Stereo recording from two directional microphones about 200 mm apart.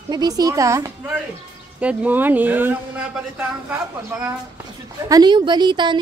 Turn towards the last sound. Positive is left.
turn(degrees=-25)  # may be behind; listen again after turning